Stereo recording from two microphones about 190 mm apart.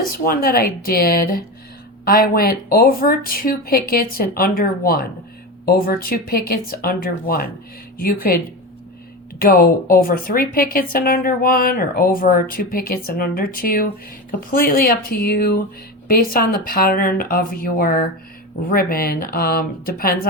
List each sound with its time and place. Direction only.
0.1 s a woman's voice: 50° left (ahead or behind)
9.4 s a woman's voice: 50° left (ahead or behind)